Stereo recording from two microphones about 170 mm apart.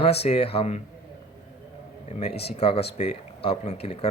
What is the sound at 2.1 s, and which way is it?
Speech, 40° left (ahead or behind).